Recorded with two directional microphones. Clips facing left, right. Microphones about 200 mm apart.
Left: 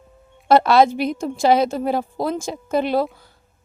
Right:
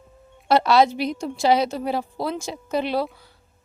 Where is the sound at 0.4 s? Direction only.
50° left (ahead or behind).